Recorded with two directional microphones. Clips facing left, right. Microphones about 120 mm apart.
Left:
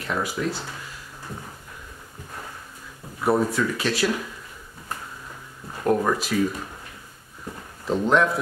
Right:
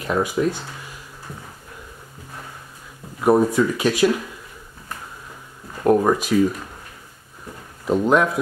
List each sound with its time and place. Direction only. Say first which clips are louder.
0.0 s speech: right 6 dB; 20° right (ahead or behind)
3.3 s speech: right 5 dB; 15° right (ahead or behind)
5.9 s speech: right 5 dB; 20° right (ahead or behind)
7.8 s speech: right 3 dB; 10° right (ahead or behind)